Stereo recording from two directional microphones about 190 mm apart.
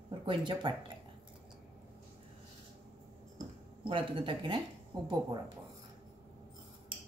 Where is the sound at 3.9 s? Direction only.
25° right (ahead or behind).